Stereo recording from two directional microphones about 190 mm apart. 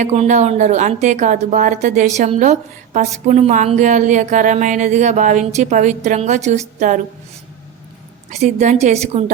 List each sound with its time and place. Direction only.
0.0 s speech: 35° right (ahead or behind)
8.3 s speech: 35° right (ahead or behind)